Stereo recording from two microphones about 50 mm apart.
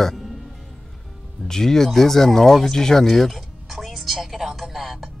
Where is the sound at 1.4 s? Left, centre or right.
Centre.